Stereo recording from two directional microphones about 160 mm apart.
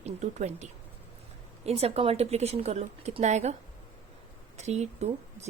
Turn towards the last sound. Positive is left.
turn(degrees=-45)  # may be behind; listen again after turning